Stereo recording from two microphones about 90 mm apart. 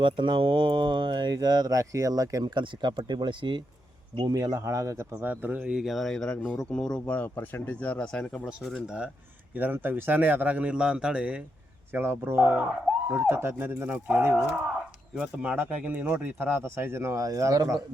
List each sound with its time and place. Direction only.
0.0 s speech: 70° right (ahead or behind); by 2.5 s 40° right (ahead or behind)
2.6 s speech: 60° right (ahead or behind)
4.3 s speech: 45° right (ahead or behind)
5.2 s speech: 20° right (ahead or behind); by 8.4 s 10° left (ahead or behind)
9.6 s a man's voice: 20° right (ahead or behind)
11.9 s speech: 25° right (ahead or behind)
15.1 s a man's voice: 10° right (ahead or behind); by 17.7 s 40° right (ahead or behind)